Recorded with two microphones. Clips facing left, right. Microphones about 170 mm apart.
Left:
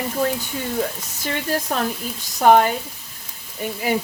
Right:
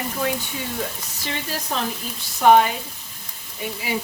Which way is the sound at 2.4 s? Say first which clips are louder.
Left 1 dB; 45° left (ahead or behind).